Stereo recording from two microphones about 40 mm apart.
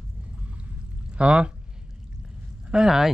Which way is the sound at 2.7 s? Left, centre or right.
Centre.